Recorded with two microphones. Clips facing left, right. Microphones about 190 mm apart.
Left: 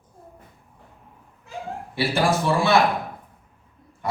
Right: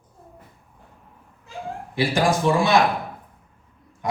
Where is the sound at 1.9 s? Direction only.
15° right (ahead or behind).